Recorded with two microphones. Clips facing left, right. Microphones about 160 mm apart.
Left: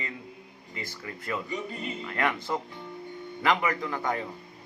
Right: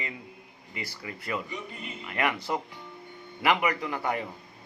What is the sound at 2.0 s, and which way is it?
Speech, 10° right (ahead or behind).